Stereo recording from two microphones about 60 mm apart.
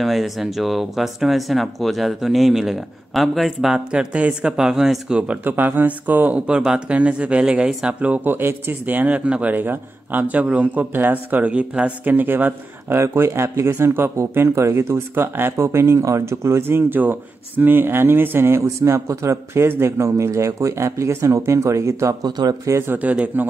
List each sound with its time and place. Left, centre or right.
0.0 s speech: centre
5.4 s speech: right
6.4 s speech: centre
8.2 s a man's voice: right
12.1 s speech: right
13.0 s speech: right
14.5 s speech: right
22.9 s a man's voice: right